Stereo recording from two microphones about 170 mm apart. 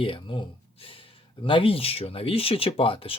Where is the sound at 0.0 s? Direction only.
30° left (ahead or behind).